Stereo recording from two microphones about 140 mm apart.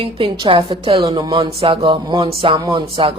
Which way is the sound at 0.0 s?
40° right (ahead or behind).